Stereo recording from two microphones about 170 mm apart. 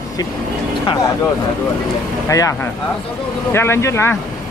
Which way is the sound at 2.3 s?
20° left (ahead or behind).